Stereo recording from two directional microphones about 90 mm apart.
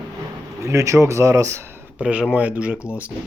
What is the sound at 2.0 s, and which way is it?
Speech, 10° right (ahead or behind).